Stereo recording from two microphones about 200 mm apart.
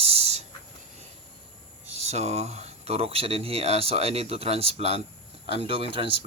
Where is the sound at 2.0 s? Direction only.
30° right (ahead or behind).